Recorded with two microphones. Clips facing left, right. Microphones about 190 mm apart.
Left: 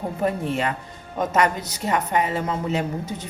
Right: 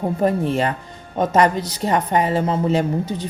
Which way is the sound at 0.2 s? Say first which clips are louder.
Right 4 dB; 35° right (ahead or behind).